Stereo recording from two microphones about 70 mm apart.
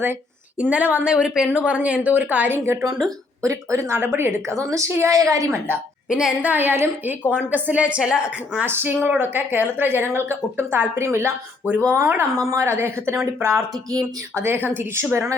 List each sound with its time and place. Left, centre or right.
0.6 s a woman's voice: centre
3.0 s a woman's voice: right
3.9 s a woman's voice: right
6.1 s a woman's voice: centre
6.4 s a woman's voice: right
8.6 s speech: right
11.9 s speech: right
13.9 s speech: right
14.4 s speech: right